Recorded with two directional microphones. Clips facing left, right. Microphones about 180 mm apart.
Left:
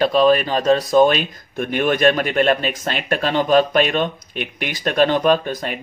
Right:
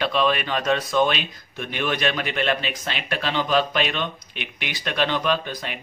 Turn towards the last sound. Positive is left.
turn(degrees=45)  # may be behind; listen again after turning